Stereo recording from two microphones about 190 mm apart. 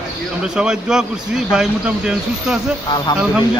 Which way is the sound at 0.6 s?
5° right (ahead or behind).